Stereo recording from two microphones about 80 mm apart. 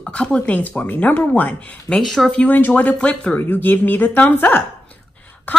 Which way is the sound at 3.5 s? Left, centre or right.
Left.